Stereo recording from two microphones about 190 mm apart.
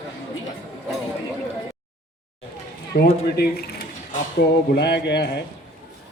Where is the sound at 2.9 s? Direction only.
55° left (ahead or behind).